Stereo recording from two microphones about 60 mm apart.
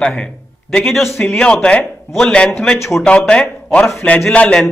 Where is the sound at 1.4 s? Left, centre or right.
Centre.